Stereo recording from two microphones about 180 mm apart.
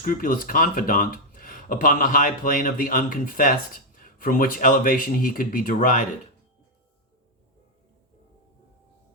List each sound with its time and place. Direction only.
0.0 s speech: 50° left (ahead or behind)